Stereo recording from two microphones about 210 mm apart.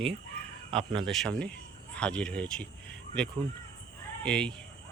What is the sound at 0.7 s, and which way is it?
Speech, 25° right (ahead or behind).